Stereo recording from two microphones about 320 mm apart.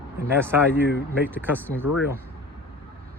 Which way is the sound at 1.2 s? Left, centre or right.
Centre.